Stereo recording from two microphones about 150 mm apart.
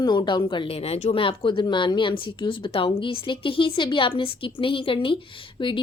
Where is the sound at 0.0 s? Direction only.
30° left (ahead or behind).